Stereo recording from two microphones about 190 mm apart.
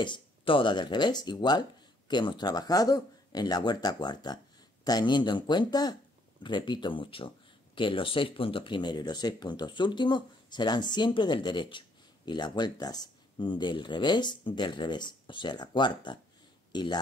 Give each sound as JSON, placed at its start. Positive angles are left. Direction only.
{"t": 0.0, "sound": "speech", "side_deg": 25}